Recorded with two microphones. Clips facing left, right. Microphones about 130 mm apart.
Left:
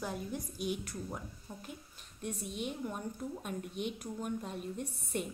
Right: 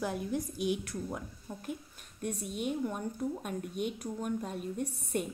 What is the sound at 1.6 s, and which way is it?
A woman's voice, 50° right (ahead or behind).